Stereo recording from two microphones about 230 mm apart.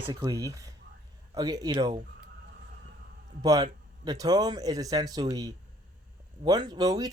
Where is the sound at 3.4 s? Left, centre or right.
Centre.